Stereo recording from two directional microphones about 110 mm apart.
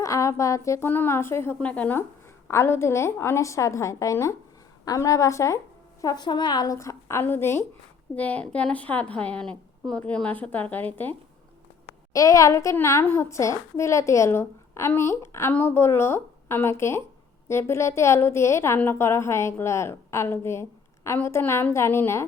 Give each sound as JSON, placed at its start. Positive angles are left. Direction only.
{"t": 0.0, "sound": "a woman's voice", "side_deg": 30}
{"t": 1.5, "sound": "a woman's voice", "side_deg": 10}
{"t": 12.1, "sound": "a woman's voice", "side_deg": 30}